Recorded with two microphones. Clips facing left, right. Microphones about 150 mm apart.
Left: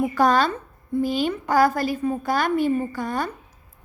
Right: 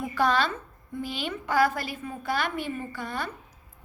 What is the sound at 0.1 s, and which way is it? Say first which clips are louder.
A woman's voice: left 6 dB; 40° left (ahead or behind).